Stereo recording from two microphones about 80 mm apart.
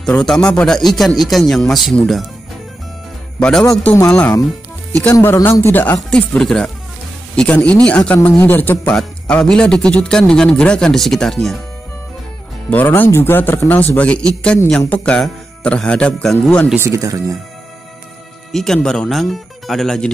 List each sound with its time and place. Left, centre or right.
0.0 s a man's voice: centre
3.3 s a man's voice: centre
3.9 s speech: left
5.2 s speech: left
5.9 s a man's voice: centre
8.9 s a man's voice: centre
12.6 s a man's voice: left
16.7 s speech: right
18.5 s a man's voice: centre